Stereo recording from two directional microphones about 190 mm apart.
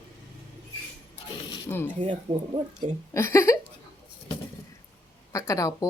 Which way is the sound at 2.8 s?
35° right (ahead or behind).